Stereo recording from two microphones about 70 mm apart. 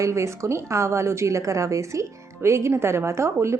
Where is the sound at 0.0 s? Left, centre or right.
Right.